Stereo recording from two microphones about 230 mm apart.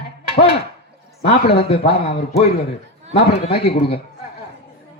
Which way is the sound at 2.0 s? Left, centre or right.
Left.